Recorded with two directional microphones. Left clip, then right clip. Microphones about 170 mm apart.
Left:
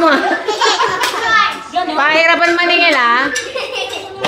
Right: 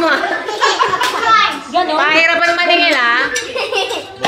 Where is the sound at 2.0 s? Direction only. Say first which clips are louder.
Left 2 dB; 10° right (ahead or behind).